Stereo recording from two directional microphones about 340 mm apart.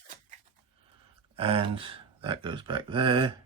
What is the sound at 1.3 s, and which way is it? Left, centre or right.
A man's voice, centre.